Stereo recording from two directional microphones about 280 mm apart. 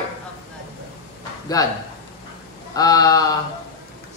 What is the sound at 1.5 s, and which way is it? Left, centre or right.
Speech, centre.